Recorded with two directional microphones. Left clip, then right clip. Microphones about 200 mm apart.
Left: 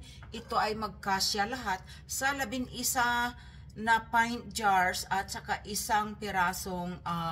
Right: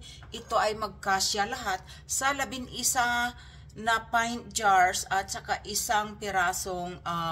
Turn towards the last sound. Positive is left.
turn(degrees=-30)  # may be behind; listen again after turning